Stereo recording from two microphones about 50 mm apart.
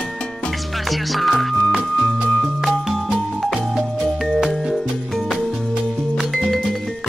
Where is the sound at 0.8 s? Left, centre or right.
Centre.